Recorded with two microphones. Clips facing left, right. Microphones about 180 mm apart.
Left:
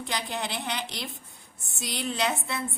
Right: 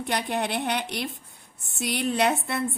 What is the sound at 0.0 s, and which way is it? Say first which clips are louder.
A woman's voice: right 5 dB; 60° right (ahead or behind).